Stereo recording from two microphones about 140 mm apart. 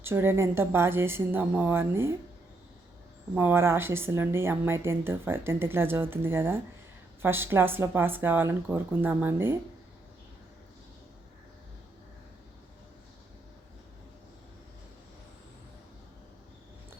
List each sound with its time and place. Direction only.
0.0 s a woman's voice: 15° right (ahead or behind)
3.3 s a woman's voice: 15° right (ahead or behind)